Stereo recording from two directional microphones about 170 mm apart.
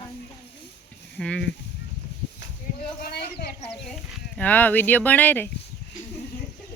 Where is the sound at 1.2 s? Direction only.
5° left (ahead or behind).